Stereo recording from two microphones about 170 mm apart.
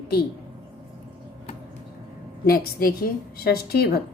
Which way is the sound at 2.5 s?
60° left (ahead or behind).